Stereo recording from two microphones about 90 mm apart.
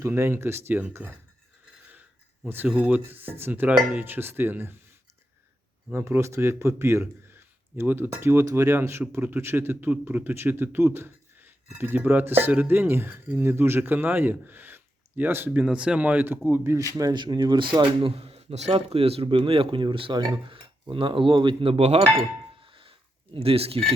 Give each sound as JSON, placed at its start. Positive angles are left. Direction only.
{"t": 0.0, "sound": "speech", "side_deg": -30}
{"t": 2.6, "sound": "speech", "side_deg": -15}
{"t": 5.9, "sound": "speech", "side_deg": -25}
{"t": 16.9, "sound": "a man's voice", "side_deg": -45}
{"t": 20.1, "sound": "speech", "side_deg": -50}
{"t": 20.9, "sound": "a man's voice", "side_deg": -75}
{"t": 22.6, "sound": "a sound", "side_deg": -85}